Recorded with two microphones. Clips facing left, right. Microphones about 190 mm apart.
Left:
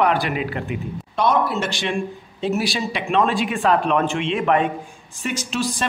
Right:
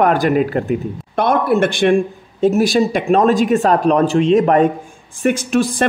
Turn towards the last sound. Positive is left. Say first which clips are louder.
# right 8 dB
turn(degrees=-55)  # may be behind; listen again after turning